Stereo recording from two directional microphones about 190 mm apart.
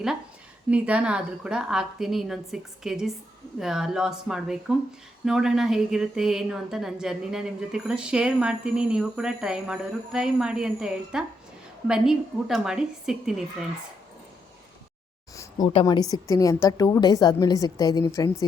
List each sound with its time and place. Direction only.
0.7 s a woman's voice: 5° right (ahead or behind)
15.4 s a sound: 20° left (ahead or behind)
15.7 s a woman's voice: 20° left (ahead or behind)